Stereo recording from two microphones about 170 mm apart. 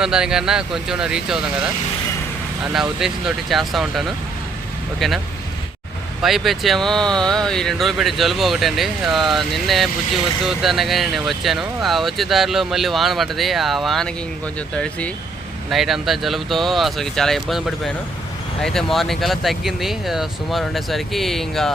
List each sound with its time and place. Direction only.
0.0 s speech: 5° right (ahead or behind)
2.7 s speech: 5° right (ahead or behind)
6.2 s speech: centre (ahead or behind)